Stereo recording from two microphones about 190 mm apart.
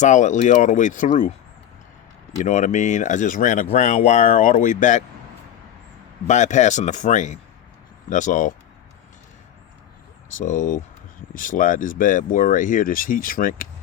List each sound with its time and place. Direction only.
0.0 s speech: 40° left (ahead or behind)
2.4 s speech: 40° left (ahead or behind)
6.2 s speech: 40° left (ahead or behind)
10.2 s speech: 45° left (ahead or behind)